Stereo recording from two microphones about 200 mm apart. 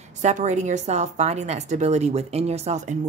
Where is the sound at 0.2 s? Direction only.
35° right (ahead or behind).